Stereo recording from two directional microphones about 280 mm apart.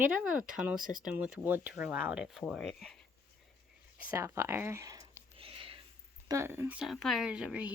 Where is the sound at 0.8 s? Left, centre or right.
Right.